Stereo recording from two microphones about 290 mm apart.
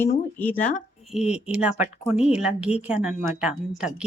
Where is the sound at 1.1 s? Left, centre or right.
Centre.